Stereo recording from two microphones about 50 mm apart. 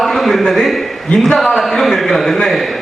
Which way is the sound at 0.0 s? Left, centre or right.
Centre.